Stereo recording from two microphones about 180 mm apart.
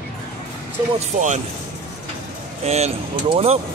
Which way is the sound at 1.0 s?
40° right (ahead or behind).